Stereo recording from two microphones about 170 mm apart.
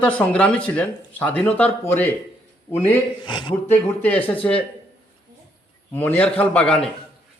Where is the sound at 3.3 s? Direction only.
30° left (ahead or behind).